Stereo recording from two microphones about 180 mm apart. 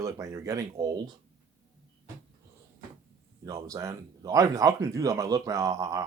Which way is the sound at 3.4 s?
15° right (ahead or behind).